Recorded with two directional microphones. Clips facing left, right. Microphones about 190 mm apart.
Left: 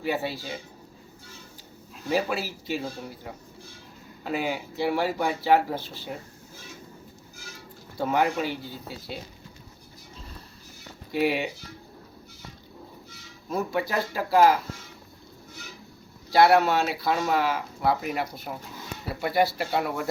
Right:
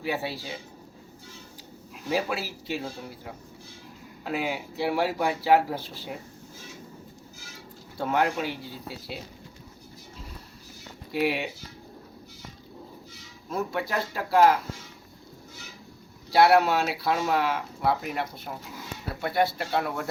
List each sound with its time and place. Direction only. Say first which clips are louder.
0.0 s speech: left 2 dB; 5° right (ahead or behind)
2.0 s speech: left 2 dB; centre (ahead or behind)
7.9 s speech: left 1 dB; 5° left (ahead or behind)
11.1 s speech: left 2 dB; centre (ahead or behind)
13.5 s speech: left 2 dB; centre (ahead or behind)
16.3 s speech: left 1 dB; centre (ahead or behind)